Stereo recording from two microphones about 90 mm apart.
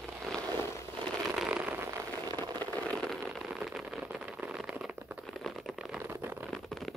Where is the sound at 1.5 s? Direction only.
20° right (ahead or behind).